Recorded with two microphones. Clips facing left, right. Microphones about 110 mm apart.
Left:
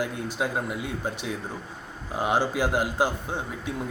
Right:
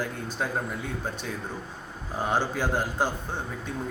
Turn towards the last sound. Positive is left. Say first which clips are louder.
# left 2 dB
turn(degrees=10)  # may be behind; listen again after turning